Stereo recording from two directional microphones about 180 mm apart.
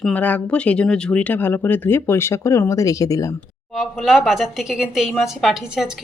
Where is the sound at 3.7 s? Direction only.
Centre (ahead or behind).